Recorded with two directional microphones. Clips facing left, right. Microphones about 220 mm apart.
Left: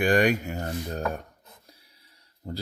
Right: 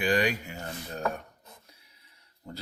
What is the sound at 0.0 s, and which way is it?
Speech, 50° left (ahead or behind).